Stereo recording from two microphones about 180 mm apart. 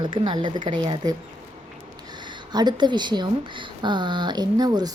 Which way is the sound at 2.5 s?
25° right (ahead or behind).